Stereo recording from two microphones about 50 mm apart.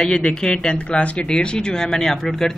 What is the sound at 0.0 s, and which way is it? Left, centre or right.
Speech, centre.